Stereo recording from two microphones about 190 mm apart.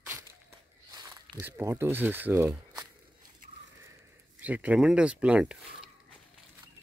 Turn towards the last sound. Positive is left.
turn(degrees=-5)  # may be behind; listen again after turning